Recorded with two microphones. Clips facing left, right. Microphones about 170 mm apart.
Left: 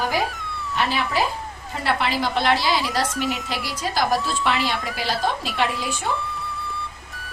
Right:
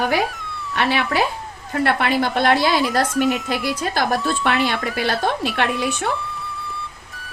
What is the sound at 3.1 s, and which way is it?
Speech, centre (ahead or behind).